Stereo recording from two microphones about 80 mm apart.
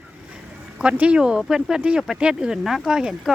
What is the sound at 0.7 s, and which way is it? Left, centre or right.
Speech, centre.